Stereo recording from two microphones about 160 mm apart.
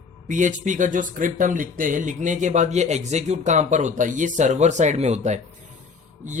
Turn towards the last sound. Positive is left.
turn(degrees=-45)  # may be behind; listen again after turning